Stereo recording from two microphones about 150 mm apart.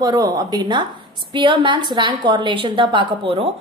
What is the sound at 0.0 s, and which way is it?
A woman's voice, 25° right (ahead or behind).